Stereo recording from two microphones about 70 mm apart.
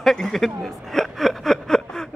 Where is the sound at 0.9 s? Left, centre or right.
Centre.